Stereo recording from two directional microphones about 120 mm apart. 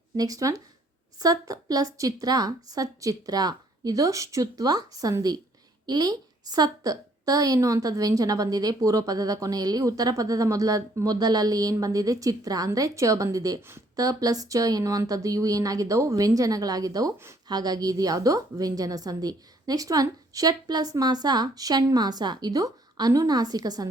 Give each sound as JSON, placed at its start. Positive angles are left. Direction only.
{"t": 0.2, "sound": "a woman's voice", "side_deg": -30}